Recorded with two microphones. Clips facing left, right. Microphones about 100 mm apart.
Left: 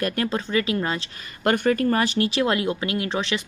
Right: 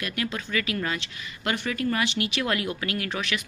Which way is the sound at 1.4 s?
45° left (ahead or behind).